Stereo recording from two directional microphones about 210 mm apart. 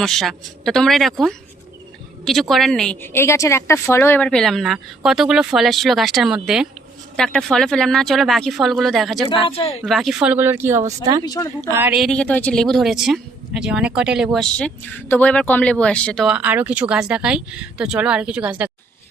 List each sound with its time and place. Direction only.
0.0 s a woman's voice: centre (ahead or behind)
9.3 s speech: 25° left (ahead or behind)
9.8 s speech: centre (ahead or behind)
11.3 s speech: 15° left (ahead or behind)
11.7 s a woman's voice: 10° right (ahead or behind)